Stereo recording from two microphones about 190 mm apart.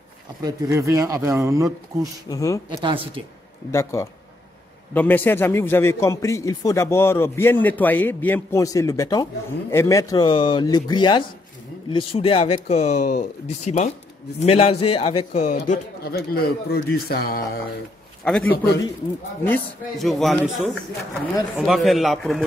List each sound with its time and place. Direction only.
0.4 s speech: 20° right (ahead or behind)
2.2 s a man's voice: 15° left (ahead or behind)
2.7 s speech: 25° right (ahead or behind)
3.7 s a man's voice: 15° left (ahead or behind); by 17.5 s 55° left (ahead or behind)
18.2 s speech: 5° left (ahead or behind)
20.0 s speech: centre (ahead or behind)